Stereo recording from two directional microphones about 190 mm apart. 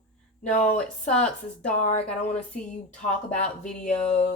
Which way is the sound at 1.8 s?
35° left (ahead or behind).